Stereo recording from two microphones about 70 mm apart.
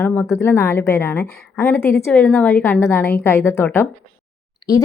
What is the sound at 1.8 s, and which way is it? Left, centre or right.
Speech, left.